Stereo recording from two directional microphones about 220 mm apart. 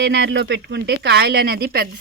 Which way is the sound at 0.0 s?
50° right (ahead or behind).